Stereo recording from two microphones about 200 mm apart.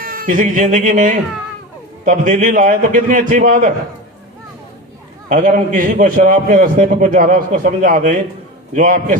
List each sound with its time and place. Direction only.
0.0 s a man's voice: 45° right (ahead or behind)
5.3 s a man's voice: 40° right (ahead or behind)